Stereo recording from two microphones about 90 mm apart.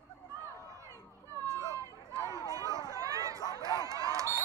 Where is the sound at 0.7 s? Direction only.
35° right (ahead or behind).